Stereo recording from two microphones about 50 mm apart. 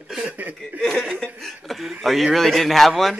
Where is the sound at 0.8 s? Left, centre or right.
Centre.